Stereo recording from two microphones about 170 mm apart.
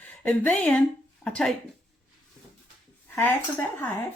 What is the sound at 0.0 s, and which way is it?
Speech, 10° left (ahead or behind).